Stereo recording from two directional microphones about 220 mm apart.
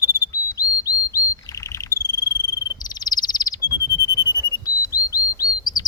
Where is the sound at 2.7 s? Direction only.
15° left (ahead or behind).